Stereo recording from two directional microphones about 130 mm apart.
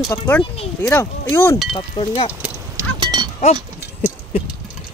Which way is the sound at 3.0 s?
35° right (ahead or behind).